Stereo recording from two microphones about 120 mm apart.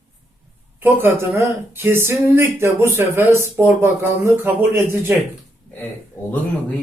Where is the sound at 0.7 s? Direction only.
15° right (ahead or behind).